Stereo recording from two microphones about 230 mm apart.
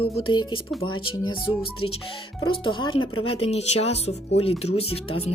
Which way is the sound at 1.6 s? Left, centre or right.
Left.